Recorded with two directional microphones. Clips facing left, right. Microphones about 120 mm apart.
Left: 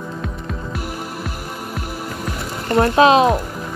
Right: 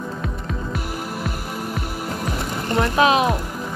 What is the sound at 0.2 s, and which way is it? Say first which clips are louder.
Throbbing: even; centre (ahead or behind).